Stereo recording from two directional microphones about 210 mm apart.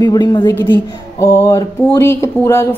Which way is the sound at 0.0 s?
20° left (ahead or behind).